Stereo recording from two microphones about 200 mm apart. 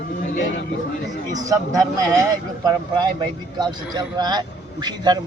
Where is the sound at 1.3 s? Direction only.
20° right (ahead or behind).